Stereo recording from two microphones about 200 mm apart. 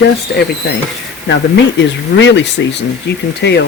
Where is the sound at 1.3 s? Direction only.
65° left (ahead or behind).